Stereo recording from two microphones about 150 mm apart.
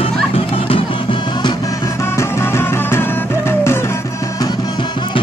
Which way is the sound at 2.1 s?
15° left (ahead or behind).